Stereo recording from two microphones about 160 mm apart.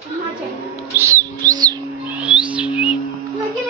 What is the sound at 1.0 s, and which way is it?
Music, 20° right (ahead or behind).